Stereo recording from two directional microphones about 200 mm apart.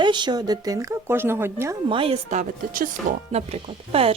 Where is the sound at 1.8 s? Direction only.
25° right (ahead or behind).